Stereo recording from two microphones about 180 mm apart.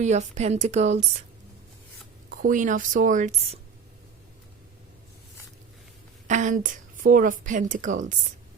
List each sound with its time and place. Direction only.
0.0 s a woman's voice: 40° right (ahead or behind)
2.3 s a woman's voice: 50° right (ahead or behind)
6.2 s a woman's voice: 45° right (ahead or behind)